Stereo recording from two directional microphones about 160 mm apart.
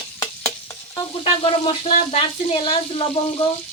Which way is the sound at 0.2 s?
20° left (ahead or behind).